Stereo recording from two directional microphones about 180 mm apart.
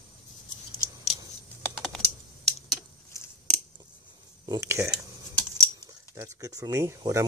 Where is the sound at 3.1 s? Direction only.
15° left (ahead or behind).